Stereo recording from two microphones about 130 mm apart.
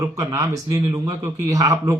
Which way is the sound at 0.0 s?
25° right (ahead or behind).